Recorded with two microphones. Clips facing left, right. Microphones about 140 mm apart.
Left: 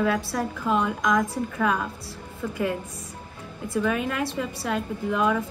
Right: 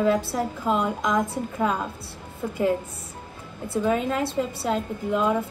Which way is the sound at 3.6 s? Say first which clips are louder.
Right 2 dB; 30° right (ahead or behind).